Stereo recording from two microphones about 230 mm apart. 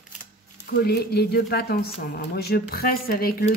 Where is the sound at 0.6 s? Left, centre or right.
Left.